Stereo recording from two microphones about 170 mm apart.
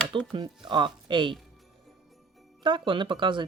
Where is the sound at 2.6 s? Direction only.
30° right (ahead or behind).